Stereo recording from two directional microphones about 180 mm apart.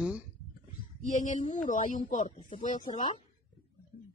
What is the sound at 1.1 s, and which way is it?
Speech, 45° left (ahead or behind).